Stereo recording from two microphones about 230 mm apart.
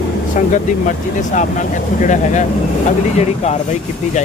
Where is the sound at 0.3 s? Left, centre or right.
Left.